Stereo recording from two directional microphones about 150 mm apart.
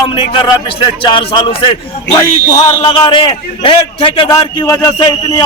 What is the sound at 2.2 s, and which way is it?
A man's voice, 25° left (ahead or behind).